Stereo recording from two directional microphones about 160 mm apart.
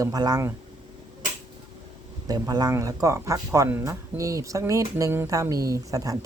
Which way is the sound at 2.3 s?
25° right (ahead or behind).